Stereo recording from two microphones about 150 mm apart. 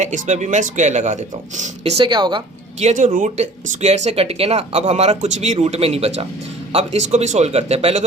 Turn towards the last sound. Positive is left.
turn(degrees=-45)  # may be behind; listen again after turning